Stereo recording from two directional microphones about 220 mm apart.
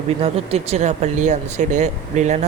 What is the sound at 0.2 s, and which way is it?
Speech, 25° right (ahead or behind).